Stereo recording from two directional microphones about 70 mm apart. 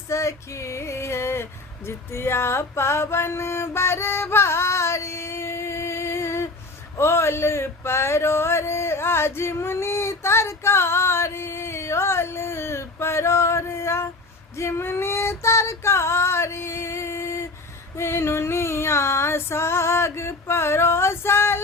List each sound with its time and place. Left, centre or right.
0.1 s female singing: left
1.9 s a sound: left
7.0 s speech: left
14.5 s female singing: left